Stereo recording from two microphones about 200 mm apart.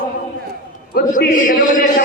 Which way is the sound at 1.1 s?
40° left (ahead or behind).